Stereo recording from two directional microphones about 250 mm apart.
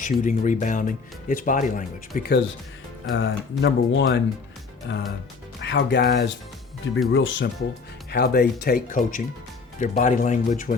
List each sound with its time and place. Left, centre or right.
0.0 s speech: left
3.1 s speech: left